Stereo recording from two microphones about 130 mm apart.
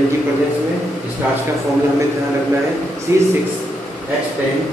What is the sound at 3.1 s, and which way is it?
Speech, 25° right (ahead or behind).